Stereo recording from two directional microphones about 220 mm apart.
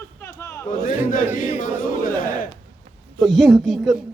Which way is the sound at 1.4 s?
35° left (ahead or behind).